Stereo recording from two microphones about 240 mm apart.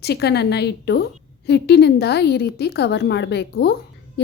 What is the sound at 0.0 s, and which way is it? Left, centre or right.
A woman's voice, left.